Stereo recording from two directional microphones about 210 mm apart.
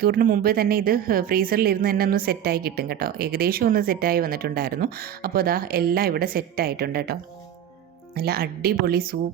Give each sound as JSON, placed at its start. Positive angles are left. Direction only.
{"t": 0.0, "sound": "a woman's voice", "side_deg": -45}